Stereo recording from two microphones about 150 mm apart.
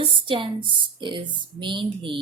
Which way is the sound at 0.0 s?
35° right (ahead or behind).